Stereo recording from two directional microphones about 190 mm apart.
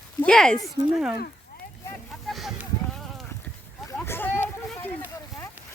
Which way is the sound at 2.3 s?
Centre (ahead or behind).